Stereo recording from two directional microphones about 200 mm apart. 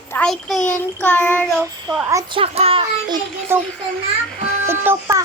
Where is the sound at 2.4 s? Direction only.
30° right (ahead or behind).